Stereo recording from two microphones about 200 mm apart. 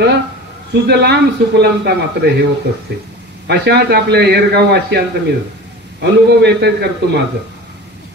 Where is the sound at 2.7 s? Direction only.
50° right (ahead or behind).